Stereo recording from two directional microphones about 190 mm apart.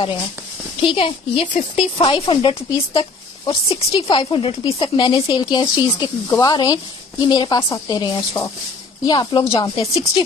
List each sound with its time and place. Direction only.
0.7 s speech: 30° left (ahead or behind)